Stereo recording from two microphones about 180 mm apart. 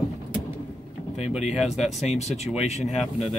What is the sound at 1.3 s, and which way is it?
Speech, 5° right (ahead or behind).